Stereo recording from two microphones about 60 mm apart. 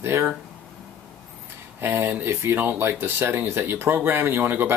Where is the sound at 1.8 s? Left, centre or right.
Right.